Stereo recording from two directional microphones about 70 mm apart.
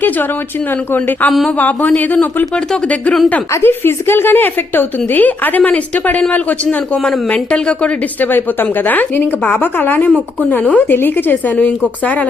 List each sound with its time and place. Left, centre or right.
0.9 s speech: left
3.5 s speech: left; by 7.9 s centre
8.2 s speech: left